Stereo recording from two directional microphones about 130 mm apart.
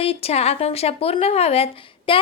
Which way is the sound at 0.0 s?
50° left (ahead or behind).